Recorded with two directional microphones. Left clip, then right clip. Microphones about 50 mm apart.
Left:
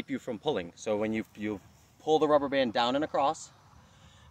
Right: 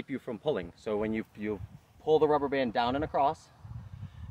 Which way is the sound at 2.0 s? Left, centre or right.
Right.